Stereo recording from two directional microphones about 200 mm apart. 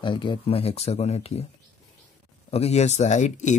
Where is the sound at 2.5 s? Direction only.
30° left (ahead or behind).